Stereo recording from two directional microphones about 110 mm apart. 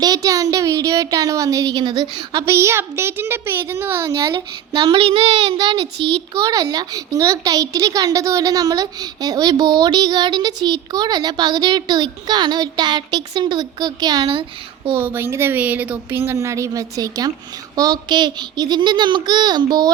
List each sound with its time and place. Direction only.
0.0 s a sound: 35° right (ahead or behind)
1.8 s a child's voice: 40° right (ahead or behind)
2.4 s speech: 25° right (ahead or behind)
4.3 s a child's voice: 50° right (ahead or behind)
6.4 s a child's voice: 35° right (ahead or behind)
14.9 s a child's voice: 20° right (ahead or behind); by 19.9 s 40° right (ahead or behind)